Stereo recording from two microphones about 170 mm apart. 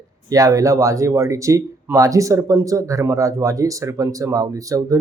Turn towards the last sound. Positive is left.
turn(degrees=-20)  # may be behind; listen again after turning